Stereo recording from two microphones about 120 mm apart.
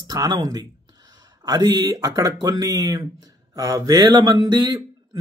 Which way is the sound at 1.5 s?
30° right (ahead or behind).